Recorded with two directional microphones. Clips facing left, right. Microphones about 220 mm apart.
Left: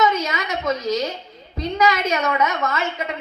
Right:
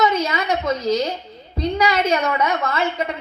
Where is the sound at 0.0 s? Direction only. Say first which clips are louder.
Right 1 dB; 30° right (ahead or behind).